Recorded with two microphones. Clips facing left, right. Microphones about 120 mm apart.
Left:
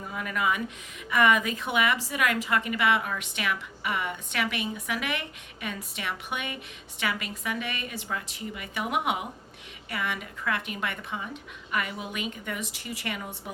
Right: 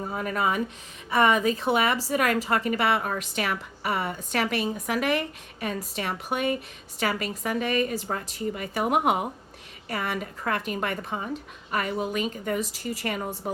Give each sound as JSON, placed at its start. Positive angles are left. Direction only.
{"t": 0.0, "sound": "a woman's voice", "side_deg": -40}